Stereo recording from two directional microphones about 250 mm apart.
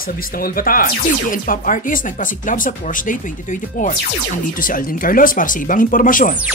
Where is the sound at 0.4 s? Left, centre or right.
Left.